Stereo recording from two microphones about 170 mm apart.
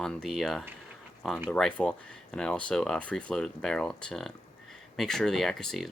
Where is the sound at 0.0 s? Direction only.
Centre (ahead or behind).